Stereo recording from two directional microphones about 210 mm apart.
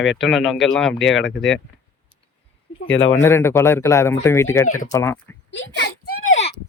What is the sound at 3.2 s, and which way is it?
A man's voice, 10° left (ahead or behind).